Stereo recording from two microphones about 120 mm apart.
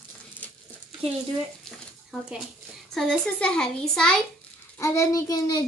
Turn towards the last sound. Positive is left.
turn(degrees=35)  # may be behind; listen again after turning